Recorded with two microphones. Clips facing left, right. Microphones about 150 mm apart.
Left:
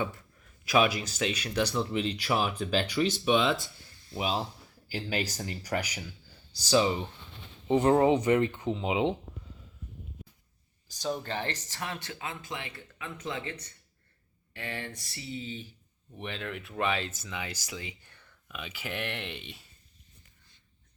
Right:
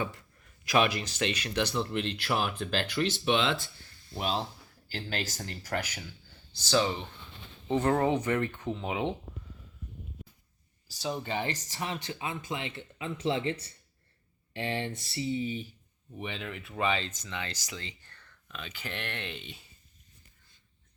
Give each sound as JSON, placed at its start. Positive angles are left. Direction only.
{"t": 0.0, "sound": "speech", "side_deg": 0}
{"t": 10.8, "sound": "speech", "side_deg": -5}
{"t": 16.1, "sound": "speech", "side_deg": -5}